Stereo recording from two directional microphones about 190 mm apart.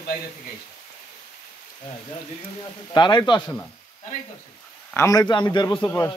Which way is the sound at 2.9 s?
25° left (ahead or behind).